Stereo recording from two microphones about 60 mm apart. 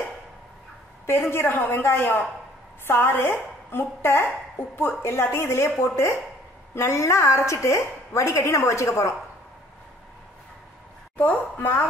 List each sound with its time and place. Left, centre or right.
1.3 s a woman's voice: left
11.5 s a woman's voice: left